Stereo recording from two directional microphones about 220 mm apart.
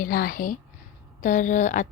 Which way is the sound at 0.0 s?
40° left (ahead or behind).